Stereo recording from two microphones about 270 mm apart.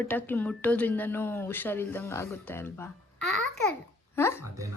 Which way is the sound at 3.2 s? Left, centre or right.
Right.